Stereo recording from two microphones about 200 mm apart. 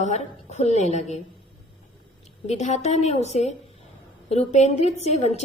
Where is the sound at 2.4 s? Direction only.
35° left (ahead or behind).